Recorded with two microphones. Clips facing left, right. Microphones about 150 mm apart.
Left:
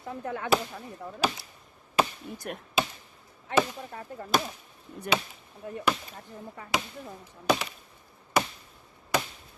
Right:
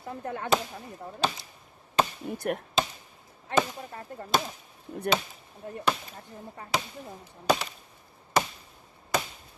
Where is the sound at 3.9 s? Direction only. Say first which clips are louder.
Left 1 dB; 45° right (ahead or behind).